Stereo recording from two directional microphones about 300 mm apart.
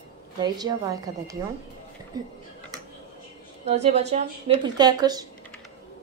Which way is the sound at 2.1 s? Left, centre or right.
Centre.